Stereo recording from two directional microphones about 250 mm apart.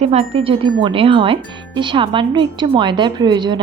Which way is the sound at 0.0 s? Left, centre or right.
Right.